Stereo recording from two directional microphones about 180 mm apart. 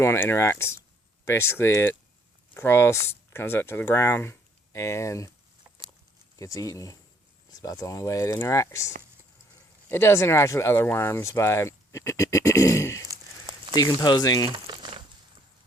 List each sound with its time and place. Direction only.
0.0 s speech: 15° left (ahead or behind)
6.3 s speech: 20° left (ahead or behind)
9.9 s speech: 15° left (ahead or behind)
14.5 s crumpling: 25° right (ahead or behind)